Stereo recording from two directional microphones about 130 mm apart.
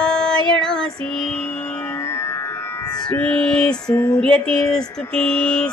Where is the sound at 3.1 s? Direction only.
5° left (ahead or behind).